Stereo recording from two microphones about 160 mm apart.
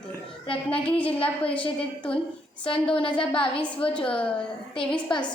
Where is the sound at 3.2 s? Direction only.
35° left (ahead or behind).